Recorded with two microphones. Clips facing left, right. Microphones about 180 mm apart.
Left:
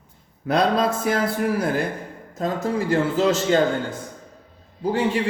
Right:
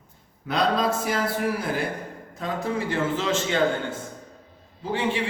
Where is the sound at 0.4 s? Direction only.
50° left (ahead or behind).